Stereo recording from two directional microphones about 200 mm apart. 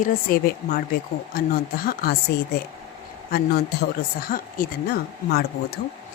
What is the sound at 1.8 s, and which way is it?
A woman's voice, 50° left (ahead or behind).